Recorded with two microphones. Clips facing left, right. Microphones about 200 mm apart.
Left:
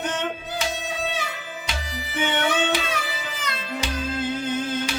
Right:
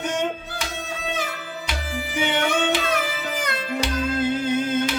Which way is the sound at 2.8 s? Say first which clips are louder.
Right 5 dB; 50° right (ahead or behind).